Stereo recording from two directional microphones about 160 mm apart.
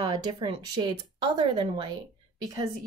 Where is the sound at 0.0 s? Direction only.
25° right (ahead or behind).